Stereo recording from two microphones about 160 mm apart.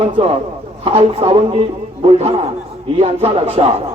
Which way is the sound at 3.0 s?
40° right (ahead or behind).